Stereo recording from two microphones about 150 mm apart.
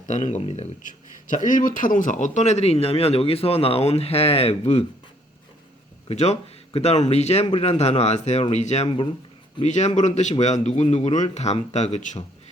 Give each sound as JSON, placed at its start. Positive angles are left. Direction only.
{"t": 0.1, "sound": "speech", "side_deg": 50}
{"t": 6.1, "sound": "speech", "side_deg": 45}